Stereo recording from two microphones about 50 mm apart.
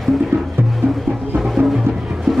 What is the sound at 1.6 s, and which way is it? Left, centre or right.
Music, right.